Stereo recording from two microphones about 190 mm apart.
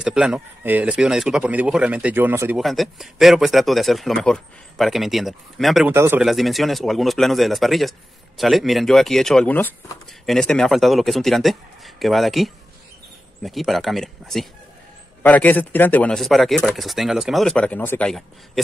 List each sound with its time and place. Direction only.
0.0 s speech: 5° right (ahead or behind)
2.6 s speech: centre (ahead or behind)
5.9 s speech: 10° right (ahead or behind)
6.2 s speech: centre (ahead or behind)